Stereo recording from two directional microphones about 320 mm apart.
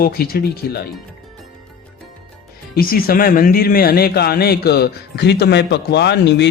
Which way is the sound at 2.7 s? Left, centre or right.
Left.